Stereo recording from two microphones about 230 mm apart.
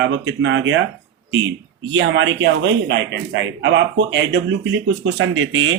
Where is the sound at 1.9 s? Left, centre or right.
Right.